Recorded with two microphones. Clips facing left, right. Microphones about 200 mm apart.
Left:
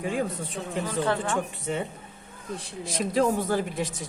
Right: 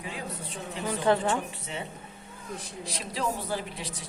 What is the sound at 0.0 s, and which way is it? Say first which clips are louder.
A woman's voice: left 9 dB; 50° left (ahead or behind).